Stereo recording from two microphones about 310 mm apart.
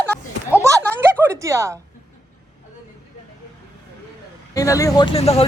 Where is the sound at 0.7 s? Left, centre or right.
Centre.